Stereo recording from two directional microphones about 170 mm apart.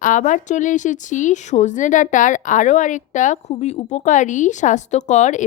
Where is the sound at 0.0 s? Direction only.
50° left (ahead or behind).